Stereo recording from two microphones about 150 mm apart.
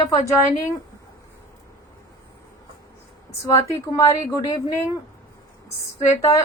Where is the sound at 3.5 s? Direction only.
20° left (ahead or behind).